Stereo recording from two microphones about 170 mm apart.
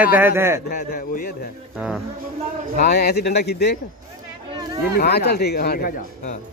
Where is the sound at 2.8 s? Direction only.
75° left (ahead or behind).